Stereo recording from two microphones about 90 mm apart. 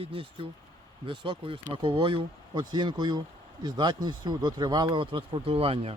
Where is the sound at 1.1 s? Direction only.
70° right (ahead or behind); by 5.8 s 90° right.